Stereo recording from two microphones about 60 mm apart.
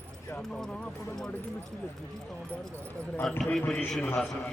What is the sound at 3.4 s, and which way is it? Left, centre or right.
Speech, centre.